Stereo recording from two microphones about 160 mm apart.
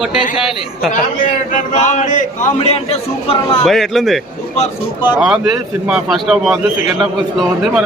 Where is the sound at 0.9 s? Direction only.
55° left (ahead or behind); by 3.6 s 35° left (ahead or behind).